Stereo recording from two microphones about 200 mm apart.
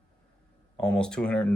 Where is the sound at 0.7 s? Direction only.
5° left (ahead or behind).